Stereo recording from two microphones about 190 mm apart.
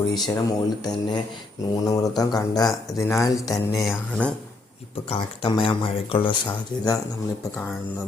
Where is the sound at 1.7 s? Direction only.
20° left (ahead or behind).